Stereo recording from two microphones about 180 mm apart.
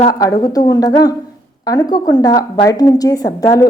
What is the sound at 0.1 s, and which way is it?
A woman's voice, 20° left (ahead or behind).